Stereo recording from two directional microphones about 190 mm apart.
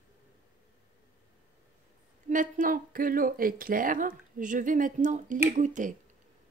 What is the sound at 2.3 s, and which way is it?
Speech, 45° right (ahead or behind).